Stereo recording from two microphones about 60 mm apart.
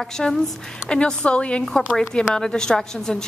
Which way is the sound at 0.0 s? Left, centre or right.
Centre.